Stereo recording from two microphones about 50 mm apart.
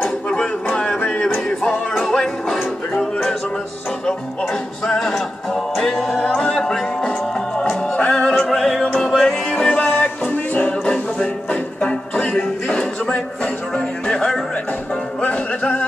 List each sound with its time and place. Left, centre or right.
0.7 s a sound: left
0.9 s music: left
2.0 s music: centre
4.8 s music: centre
6.1 s music: centre
8.8 s music: centre
9.8 s music: left
15.2 s music: left